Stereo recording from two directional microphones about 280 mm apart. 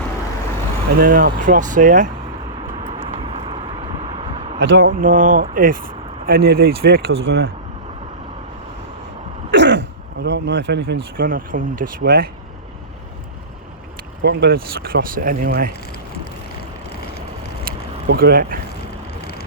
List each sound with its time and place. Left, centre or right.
0.9 s speech: right
2.8 s a sound: right
4.6 s speech: right
9.5 s throat clearing: right
10.2 s speech: right
14.2 s speech: right
17.7 s vehicle: right